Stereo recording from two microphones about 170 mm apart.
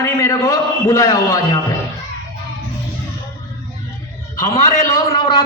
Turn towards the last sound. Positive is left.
turn(degrees=25)  # may be behind; listen again after turning